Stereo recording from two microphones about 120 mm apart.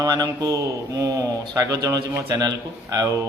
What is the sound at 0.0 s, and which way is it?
A man's voice, 35° right (ahead or behind).